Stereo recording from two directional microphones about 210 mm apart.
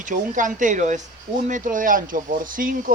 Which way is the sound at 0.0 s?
40° right (ahead or behind).